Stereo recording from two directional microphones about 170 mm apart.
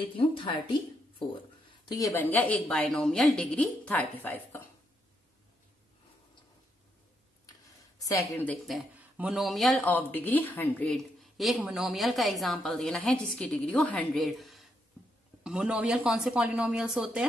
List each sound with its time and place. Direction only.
0.0 s a woman's voice: 30° left (ahead or behind)
1.9 s a woman's voice: 20° left (ahead or behind)
8.0 s a woman's voice: 20° left (ahead or behind)
8.6 s speech: 5° right (ahead or behind)